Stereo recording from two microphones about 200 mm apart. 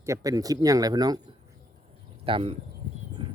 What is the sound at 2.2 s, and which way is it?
Speech, 25° right (ahead or behind).